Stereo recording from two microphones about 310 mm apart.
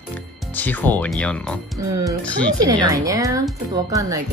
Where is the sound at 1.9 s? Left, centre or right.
Centre.